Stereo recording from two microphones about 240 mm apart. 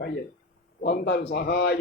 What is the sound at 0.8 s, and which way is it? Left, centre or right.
Speech, left.